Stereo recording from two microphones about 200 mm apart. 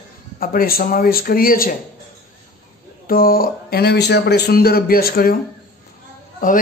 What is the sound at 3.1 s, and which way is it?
A woman's voice, 45° left (ahead or behind).